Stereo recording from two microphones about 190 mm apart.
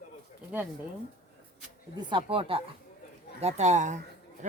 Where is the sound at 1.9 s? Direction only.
25° right (ahead or behind).